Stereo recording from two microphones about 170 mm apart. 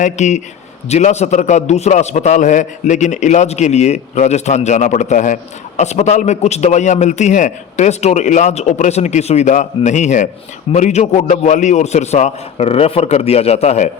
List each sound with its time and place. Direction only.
0.0 s a man's voice: 45° left (ahead or behind)